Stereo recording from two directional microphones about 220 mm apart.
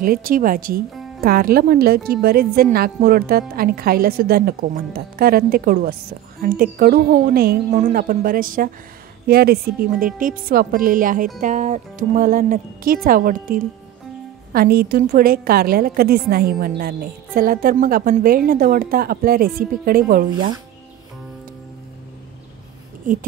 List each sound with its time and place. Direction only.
0.0 s a woman's voice: 40° right (ahead or behind)